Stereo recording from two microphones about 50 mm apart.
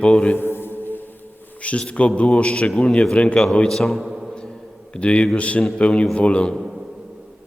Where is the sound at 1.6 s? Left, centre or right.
Left.